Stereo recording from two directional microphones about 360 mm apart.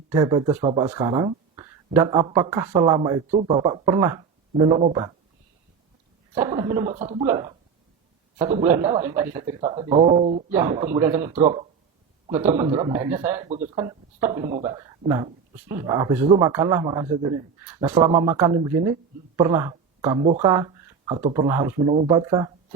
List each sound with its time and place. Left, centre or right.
0.1 s speech: centre
6.5 s chuckle: centre
7.3 s speech: centre
8.7 s speech: centre
9.1 s speech: centre
10.5 s speech: centre
15.7 s speech: centre